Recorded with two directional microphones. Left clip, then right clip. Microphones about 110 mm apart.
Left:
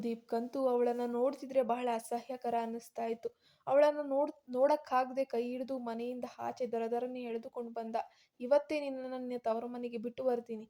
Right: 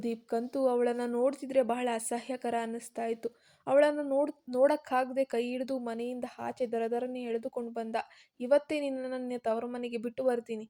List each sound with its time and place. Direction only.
0.0 s speech: 30° right (ahead or behind)